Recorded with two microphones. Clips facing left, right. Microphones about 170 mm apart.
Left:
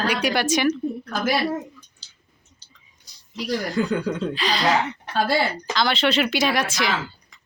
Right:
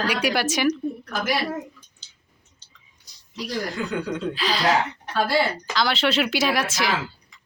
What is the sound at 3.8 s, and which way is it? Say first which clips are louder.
Speech: left 7 dB; 40° left (ahead or behind).